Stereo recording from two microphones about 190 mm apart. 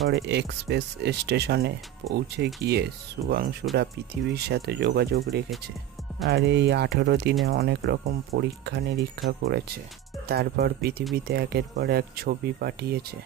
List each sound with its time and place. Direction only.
0.1 s speech: 65° right (ahead or behind)
6.2 s speech: 55° right (ahead or behind)